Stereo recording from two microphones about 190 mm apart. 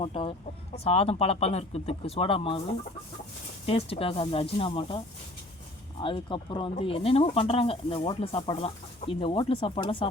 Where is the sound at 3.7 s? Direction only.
30° left (ahead or behind).